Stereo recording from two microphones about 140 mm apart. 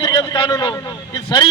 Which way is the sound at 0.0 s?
35° left (ahead or behind).